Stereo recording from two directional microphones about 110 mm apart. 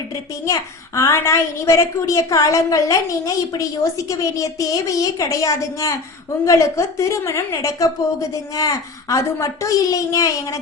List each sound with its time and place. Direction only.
0.4 s a woman's voice: 30° left (ahead or behind)